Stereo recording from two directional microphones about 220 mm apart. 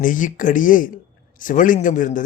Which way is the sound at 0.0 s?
35° left (ahead or behind).